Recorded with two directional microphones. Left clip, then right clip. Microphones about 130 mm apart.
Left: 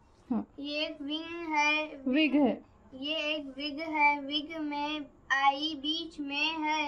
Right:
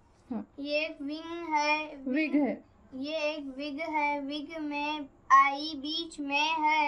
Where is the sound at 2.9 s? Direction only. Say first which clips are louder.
Even; 25° right (ahead or behind).